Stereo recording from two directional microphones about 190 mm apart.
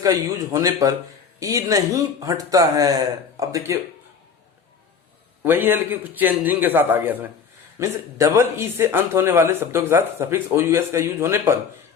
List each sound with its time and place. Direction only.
0.0 s speech: 15° right (ahead or behind)
5.4 s speech: 10° right (ahead or behind)